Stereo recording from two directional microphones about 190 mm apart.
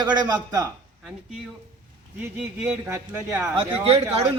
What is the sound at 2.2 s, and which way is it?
Speech, 10° right (ahead or behind).